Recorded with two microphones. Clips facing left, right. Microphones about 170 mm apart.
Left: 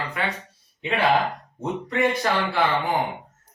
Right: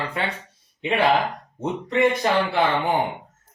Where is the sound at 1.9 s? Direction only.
20° right (ahead or behind).